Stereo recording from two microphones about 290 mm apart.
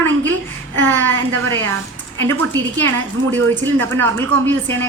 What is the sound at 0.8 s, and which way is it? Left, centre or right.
Speech, centre.